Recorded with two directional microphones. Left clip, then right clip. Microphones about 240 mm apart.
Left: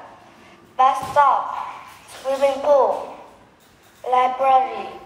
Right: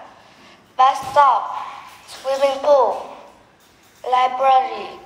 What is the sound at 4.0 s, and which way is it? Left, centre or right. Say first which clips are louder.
Speech: right 1 dB; centre.